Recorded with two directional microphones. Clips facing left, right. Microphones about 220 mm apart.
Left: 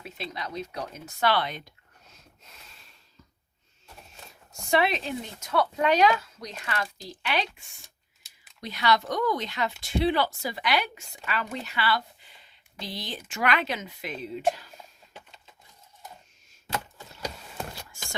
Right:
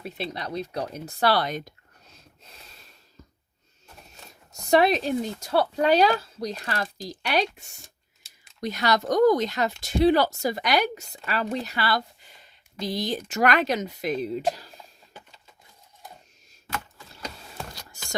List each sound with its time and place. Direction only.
0.0 s speech: 35° right (ahead or behind)
2.1 s a sound: 35° right (ahead or behind)
4.7 s speech: 40° right (ahead or behind)